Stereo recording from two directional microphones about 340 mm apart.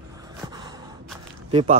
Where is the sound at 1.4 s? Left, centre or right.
Centre.